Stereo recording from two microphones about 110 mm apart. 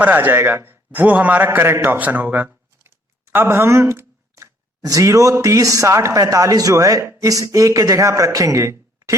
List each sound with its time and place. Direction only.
0.0 s a man's voice: 15° right (ahead or behind)